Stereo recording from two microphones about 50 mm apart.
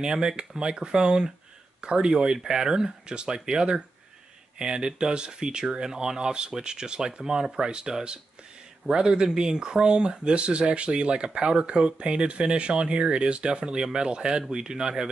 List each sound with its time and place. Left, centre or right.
0.0 s speech: centre